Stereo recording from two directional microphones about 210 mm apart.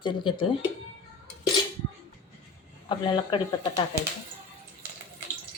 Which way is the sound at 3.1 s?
25° left (ahead or behind).